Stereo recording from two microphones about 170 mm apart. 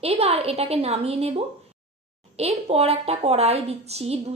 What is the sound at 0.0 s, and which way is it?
A woman's voice, 35° right (ahead or behind).